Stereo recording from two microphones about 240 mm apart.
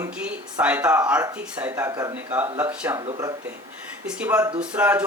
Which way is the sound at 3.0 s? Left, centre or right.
Centre.